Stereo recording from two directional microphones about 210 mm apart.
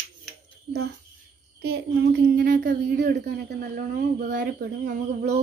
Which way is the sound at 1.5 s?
50° right (ahead or behind).